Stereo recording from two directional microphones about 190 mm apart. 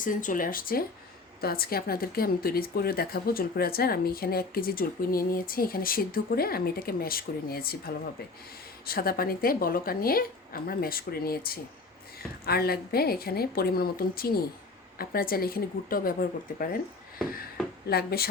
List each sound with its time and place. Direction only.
0.0 s speech: 45° left (ahead or behind)
17.8 s speech: 55° left (ahead or behind)